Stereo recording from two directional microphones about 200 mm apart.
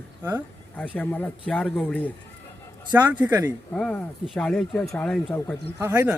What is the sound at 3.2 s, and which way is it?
Speech, 10° right (ahead or behind).